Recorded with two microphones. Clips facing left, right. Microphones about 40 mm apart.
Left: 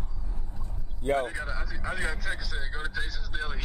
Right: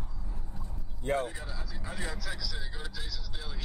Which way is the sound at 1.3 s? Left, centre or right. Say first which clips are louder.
Left 8 dB; left.